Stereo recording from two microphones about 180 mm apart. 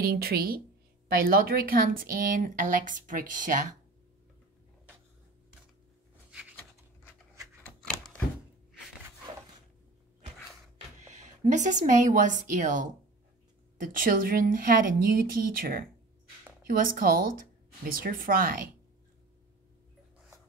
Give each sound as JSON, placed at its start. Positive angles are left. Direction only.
{"t": 0.0, "sound": "a woman's voice", "side_deg": -55}
{"t": 7.6, "sound": "a sound", "side_deg": 5}
{"t": 11.0, "sound": "speech", "side_deg": -40}